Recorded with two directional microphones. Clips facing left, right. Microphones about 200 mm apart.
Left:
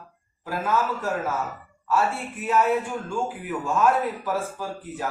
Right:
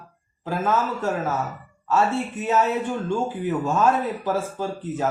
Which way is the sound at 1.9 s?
25° right (ahead or behind).